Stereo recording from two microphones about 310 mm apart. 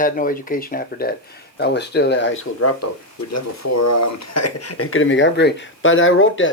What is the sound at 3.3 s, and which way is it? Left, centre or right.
Speech, left.